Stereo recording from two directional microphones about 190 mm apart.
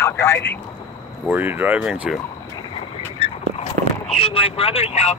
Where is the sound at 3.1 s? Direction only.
30° left (ahead or behind).